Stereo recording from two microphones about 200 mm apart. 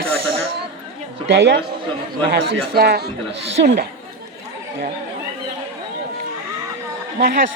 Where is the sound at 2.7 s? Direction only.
50° right (ahead or behind).